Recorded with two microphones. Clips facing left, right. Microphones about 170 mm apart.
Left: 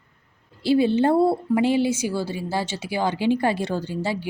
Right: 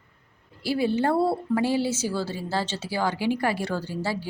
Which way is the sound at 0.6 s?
25° left (ahead or behind).